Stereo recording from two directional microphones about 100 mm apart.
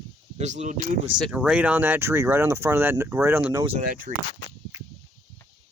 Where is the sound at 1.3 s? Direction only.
10° right (ahead or behind).